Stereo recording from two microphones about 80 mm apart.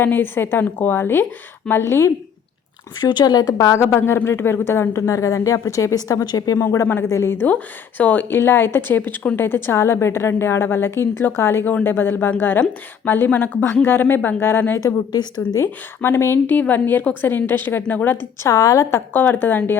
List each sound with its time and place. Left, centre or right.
0.0 s a woman's voice: left
3.0 s a woman's voice: left
3.8 s speech: left
6.6 s speech: left
7.4 s a woman's voice: centre
18.4 s a woman's voice: left